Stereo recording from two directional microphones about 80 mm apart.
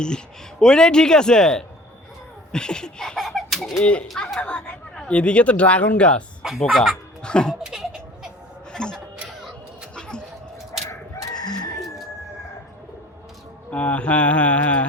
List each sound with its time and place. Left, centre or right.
0.6 s speech: centre
4.2 s speech: centre
6.6 s speech: centre
7.2 s speech: centre
7.6 s laughter: centre
8.7 s a sound: centre
11.3 s chicken: left
13.7 s speech: centre